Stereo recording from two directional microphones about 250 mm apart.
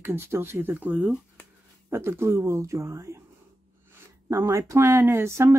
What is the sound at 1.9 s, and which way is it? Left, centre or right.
Speech, centre.